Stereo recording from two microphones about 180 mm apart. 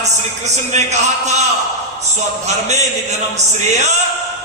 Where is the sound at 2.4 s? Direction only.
40° right (ahead or behind).